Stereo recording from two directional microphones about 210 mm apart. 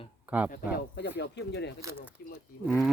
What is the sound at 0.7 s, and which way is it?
Speech, 55° left (ahead or behind).